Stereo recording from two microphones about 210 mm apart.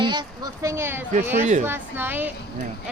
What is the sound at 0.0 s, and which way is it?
Speech, 20° right (ahead or behind).